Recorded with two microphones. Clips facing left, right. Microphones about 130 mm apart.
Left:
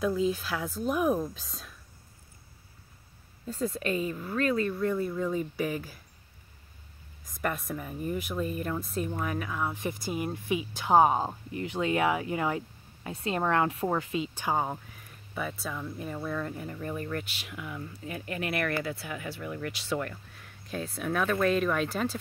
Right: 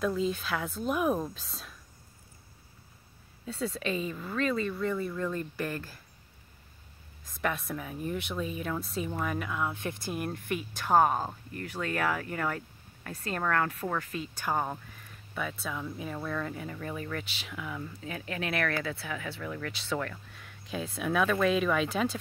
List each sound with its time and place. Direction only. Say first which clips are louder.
0.0 s speech: left 2 dB; 5° left (ahead or behind)
4.1 s speech: left 2 dB; 5° left (ahead or behind)
7.4 s speech: even; centre (ahead or behind)
15.3 s speech: left 1 dB; 5° left (ahead or behind)